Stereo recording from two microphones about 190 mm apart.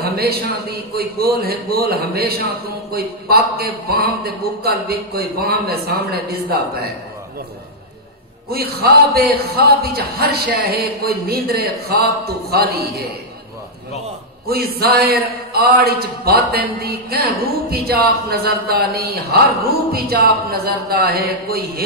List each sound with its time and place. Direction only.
0.0 s a man's voice: 55° right (ahead or behind)
8.5 s a man's voice: 55° right (ahead or behind)
14.5 s a man's voice: 55° right (ahead or behind)